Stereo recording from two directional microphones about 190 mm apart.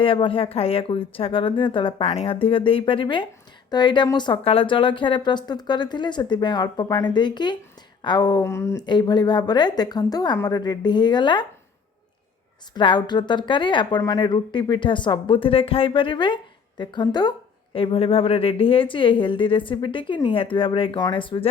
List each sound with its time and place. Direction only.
0.0 s speech: 25° left (ahead or behind)
12.7 s speech: 25° left (ahead or behind)